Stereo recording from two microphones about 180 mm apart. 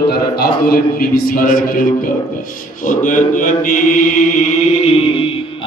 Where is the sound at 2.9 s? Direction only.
45° left (ahead or behind).